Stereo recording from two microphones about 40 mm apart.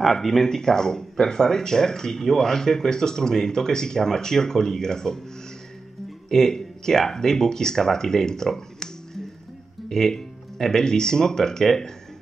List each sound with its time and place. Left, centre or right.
0.0 s speech: centre
6.2 s speech: centre